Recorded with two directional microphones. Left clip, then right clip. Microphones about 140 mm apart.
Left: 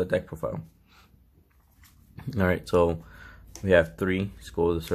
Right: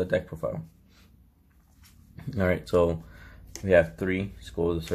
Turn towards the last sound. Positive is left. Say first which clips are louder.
# left 3 dB
turn(degrees=35)  # may be behind; listen again after turning